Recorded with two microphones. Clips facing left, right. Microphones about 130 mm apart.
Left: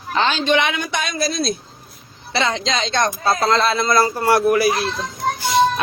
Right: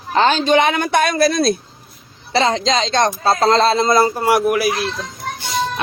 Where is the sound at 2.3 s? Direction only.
35° right (ahead or behind).